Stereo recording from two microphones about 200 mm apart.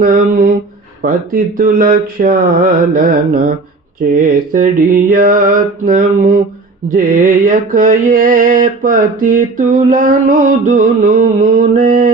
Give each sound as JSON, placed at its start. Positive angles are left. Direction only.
{"t": 0.0, "sound": "mantra", "side_deg": -45}